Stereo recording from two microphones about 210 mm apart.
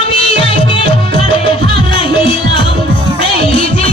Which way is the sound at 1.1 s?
25° left (ahead or behind).